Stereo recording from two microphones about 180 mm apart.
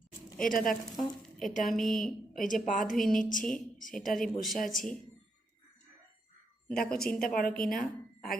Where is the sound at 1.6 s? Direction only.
Centre (ahead or behind).